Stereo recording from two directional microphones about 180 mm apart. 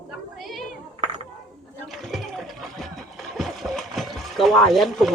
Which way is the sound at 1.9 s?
Centre (ahead or behind).